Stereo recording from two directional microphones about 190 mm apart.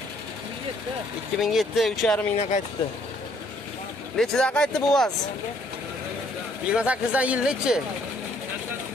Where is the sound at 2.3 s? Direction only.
35° left (ahead or behind).